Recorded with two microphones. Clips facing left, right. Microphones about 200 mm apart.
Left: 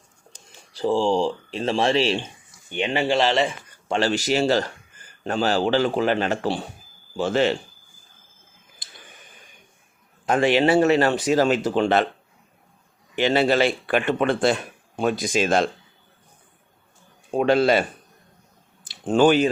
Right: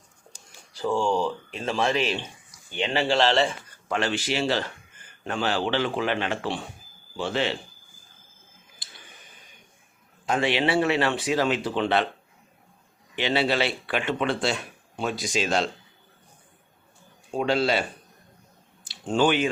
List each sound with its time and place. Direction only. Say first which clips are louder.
0.7 s speech: left 4 dB; 30° left (ahead or behind); by 3.5 s 10° left (ahead or behind)
3.8 s a man's voice: left 5 dB; 35° left (ahead or behind)
10.2 s speech: left 6 dB; 50° left (ahead or behind)
13.1 s speech: left 5 dB; 45° left (ahead or behind)
17.3 s speech: left 5 dB; 55° left (ahead or behind)
18.9 s speech: left 5 dB; 50° left (ahead or behind)